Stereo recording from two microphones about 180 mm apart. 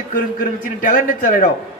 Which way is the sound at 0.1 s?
50° left (ahead or behind).